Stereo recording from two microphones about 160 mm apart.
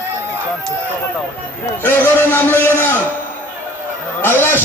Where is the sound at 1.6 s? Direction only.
10° left (ahead or behind).